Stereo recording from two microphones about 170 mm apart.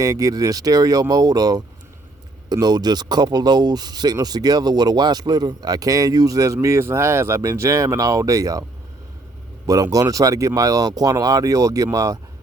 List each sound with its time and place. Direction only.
0.0 s speech: 20° right (ahead or behind)
9.6 s speech: 20° right (ahead or behind)